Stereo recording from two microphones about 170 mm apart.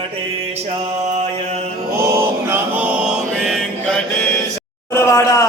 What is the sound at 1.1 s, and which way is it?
Mantra, 40° right (ahead or behind).